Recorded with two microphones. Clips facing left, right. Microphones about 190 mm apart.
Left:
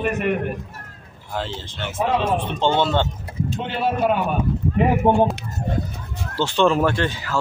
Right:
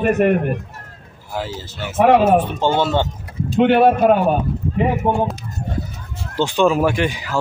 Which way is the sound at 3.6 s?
65° right (ahead or behind).